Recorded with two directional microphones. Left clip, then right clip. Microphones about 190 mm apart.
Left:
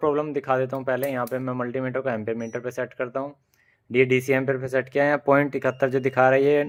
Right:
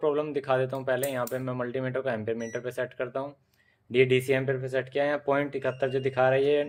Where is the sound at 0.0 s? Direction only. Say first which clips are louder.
Left 4 dB; 25° left (ahead or behind).